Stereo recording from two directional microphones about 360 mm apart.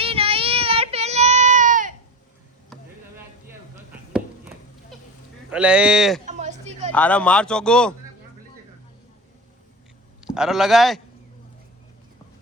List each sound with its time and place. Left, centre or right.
0.0 s child singing: centre
4.1 s cat: centre
5.5 s speech: centre
6.2 s a sound: centre
6.9 s speech: centre
10.2 s speech: centre